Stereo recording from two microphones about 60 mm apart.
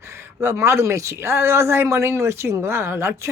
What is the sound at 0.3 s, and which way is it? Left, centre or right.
Speech, right.